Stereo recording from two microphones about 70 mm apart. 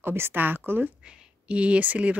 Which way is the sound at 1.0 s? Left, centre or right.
Centre.